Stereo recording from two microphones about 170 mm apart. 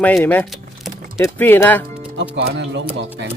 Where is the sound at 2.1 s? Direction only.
80° right.